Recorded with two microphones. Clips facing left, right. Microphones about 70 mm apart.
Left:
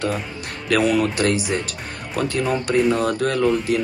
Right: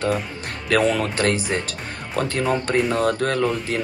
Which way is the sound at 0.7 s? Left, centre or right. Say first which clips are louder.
Left 1 dB; right.